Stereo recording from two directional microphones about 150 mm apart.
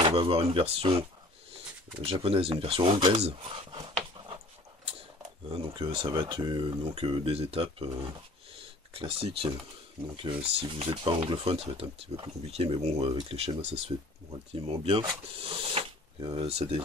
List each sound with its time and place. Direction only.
0.0 s speech: 35° right (ahead or behind)
5.8 s speech: 35° right (ahead or behind)
10.7 s speech: 40° right (ahead or behind)